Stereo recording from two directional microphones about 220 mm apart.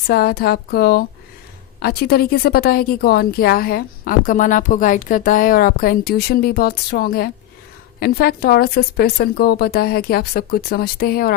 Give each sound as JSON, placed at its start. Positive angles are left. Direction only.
{"t": 0.1, "sound": "speech", "side_deg": 45}